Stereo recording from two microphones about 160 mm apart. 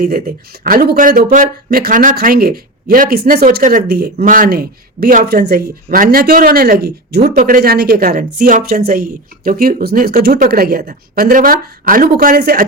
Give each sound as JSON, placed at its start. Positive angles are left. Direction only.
{"t": 0.0, "sound": "speech", "side_deg": -65}